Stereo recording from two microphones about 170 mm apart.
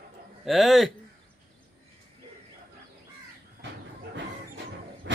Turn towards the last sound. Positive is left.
turn(degrees=-90)